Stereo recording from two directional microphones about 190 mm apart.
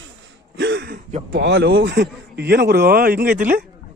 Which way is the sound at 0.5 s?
65° right (ahead or behind).